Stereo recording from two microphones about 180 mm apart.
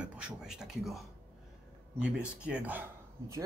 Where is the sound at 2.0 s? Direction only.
5° right (ahead or behind).